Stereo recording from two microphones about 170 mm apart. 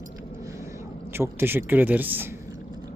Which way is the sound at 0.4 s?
15° right (ahead or behind).